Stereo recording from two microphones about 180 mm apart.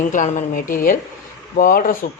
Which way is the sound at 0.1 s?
45° left (ahead or behind).